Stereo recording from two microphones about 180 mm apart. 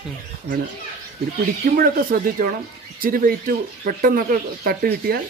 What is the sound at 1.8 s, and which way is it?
Speech, 50° right (ahead or behind).